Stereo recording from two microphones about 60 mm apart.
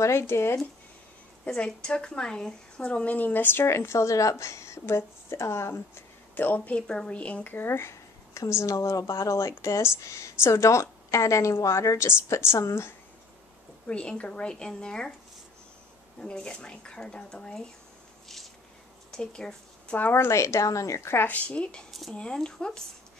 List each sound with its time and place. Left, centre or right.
0.0 s a woman's voice: left
1.4 s speech: centre; by 5.8 s left
6.3 s speech: left
6.9 s speech: centre
7.5 s speech: left
8.4 s a woman's voice: left
13.8 s speech: centre
16.2 s speech: centre
19.1 s speech: centre
20.0 s speech: left
21.3 s speech: left